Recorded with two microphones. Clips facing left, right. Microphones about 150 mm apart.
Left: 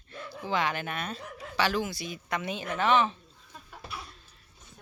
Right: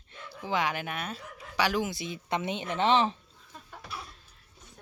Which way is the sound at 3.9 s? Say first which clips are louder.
Even; centre (ahead or behind).